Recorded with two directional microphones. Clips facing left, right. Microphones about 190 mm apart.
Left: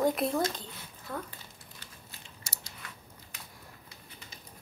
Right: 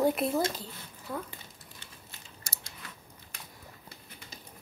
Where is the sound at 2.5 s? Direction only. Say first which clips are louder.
Right 1 dB; 50° right (ahead or behind).